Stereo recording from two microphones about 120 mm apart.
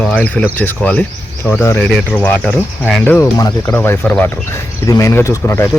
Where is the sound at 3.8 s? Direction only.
15° left (ahead or behind).